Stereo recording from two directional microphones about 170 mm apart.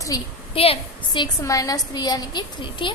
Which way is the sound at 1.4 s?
20° left (ahead or behind).